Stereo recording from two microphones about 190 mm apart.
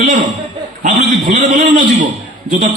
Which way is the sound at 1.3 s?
45° right (ahead or behind).